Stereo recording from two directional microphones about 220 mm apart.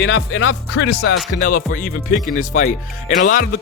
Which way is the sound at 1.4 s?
35° left (ahead or behind).